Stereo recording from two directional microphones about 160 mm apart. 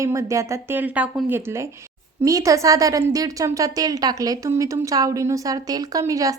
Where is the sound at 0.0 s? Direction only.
20° right (ahead or behind).